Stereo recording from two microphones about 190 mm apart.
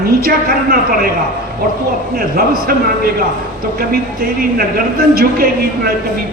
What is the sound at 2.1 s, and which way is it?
Speech, 50° right (ahead or behind).